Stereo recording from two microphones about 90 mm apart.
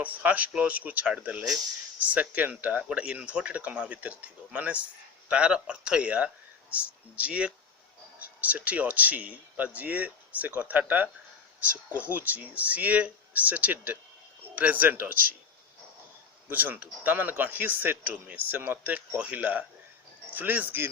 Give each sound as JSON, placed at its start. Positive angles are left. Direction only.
{"t": 0.0, "sound": "speech", "side_deg": -15}
{"t": 16.5, "sound": "speech", "side_deg": -20}